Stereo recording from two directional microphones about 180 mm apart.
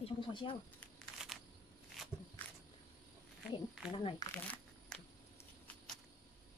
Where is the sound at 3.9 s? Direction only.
20° left (ahead or behind).